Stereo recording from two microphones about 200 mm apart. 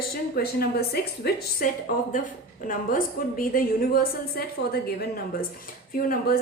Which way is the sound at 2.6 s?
45° left (ahead or behind).